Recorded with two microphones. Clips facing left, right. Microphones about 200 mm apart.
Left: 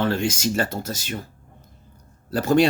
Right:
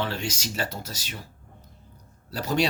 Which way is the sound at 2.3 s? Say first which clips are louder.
Left 8 dB; 50° left (ahead or behind).